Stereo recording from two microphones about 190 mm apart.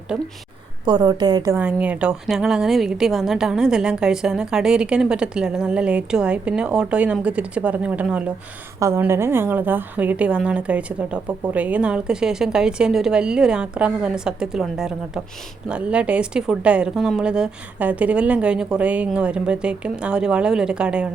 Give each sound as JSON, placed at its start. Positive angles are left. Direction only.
{"t": 0.1, "sound": "a woman's voice", "side_deg": -5}
{"t": 0.9, "sound": "a woman's voice", "side_deg": -20}
{"t": 1.5, "sound": "a woman's voice", "side_deg": -5}